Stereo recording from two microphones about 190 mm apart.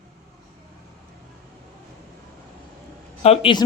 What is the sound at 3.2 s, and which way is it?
Speech, 25° left (ahead or behind).